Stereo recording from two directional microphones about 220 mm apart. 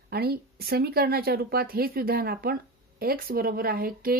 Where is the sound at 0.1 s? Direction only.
45° right (ahead or behind).